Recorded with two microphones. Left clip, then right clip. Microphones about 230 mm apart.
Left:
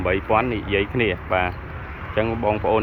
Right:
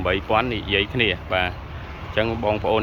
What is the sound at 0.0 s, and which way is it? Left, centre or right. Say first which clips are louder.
Speech: left 1 dB; centre.